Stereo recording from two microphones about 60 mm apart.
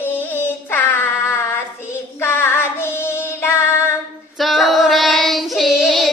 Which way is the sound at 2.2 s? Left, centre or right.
Left.